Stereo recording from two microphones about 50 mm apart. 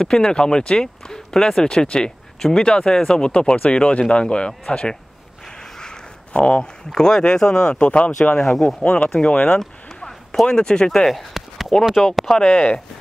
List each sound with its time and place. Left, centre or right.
0.0 s speech: centre
8.4 s speech: centre
8.8 s speech: left
10.0 s speech: centre
11.3 s a sound: centre
11.8 s speech: centre
12.3 s speech: centre